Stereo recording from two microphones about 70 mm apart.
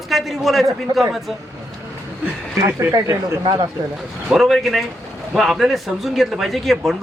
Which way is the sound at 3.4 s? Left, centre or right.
Right.